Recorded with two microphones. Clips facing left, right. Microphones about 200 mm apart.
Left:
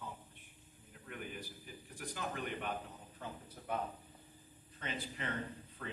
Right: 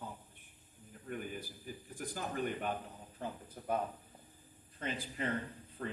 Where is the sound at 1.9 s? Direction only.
40° right (ahead or behind).